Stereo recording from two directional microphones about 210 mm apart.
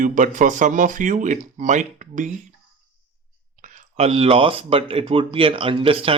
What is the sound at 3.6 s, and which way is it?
Speech, 30° right (ahead or behind).